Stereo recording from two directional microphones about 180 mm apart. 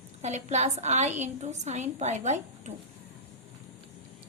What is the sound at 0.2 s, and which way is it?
A woman's voice, 40° right (ahead or behind).